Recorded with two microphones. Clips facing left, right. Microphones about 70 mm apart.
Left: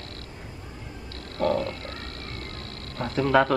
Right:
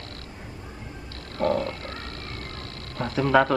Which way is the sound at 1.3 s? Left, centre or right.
Right.